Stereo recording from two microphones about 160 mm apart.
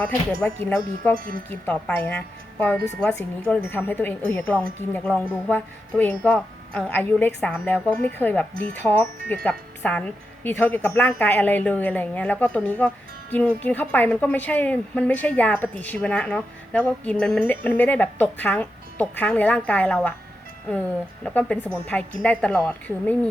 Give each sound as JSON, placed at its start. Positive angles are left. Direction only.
{"t": 0.0, "sound": "a woman's voice", "side_deg": 5}
{"t": 1.1, "sound": "chime", "side_deg": -60}
{"t": 1.5, "sound": "a woman's voice", "side_deg": 10}
{"t": 21.2, "sound": "a woman's voice", "side_deg": 10}